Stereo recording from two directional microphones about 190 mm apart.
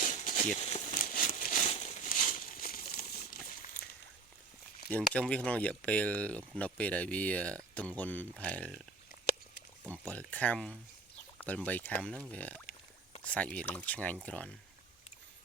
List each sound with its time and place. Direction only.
0.0 s crumpling: 40° left (ahead or behind)
5.1 s speech: 5° left (ahead or behind)
10.1 s speech: 10° left (ahead or behind)